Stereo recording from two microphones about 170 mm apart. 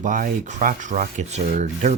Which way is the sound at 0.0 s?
50° right (ahead or behind).